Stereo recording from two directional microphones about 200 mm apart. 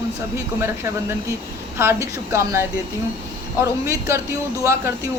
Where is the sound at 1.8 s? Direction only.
15° right (ahead or behind).